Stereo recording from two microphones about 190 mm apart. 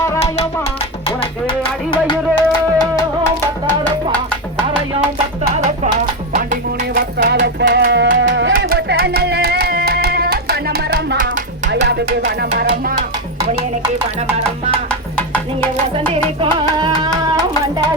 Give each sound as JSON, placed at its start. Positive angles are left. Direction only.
{"t": 1.0, "sound": "music", "side_deg": 25}
{"t": 6.3, "sound": "music", "side_deg": -45}
{"t": 12.5, "sound": "music", "side_deg": -50}
{"t": 13.4, "sound": "music", "side_deg": -35}
{"t": 14.8, "sound": "music", "side_deg": 10}
{"t": 16.0, "sound": "music", "side_deg": -25}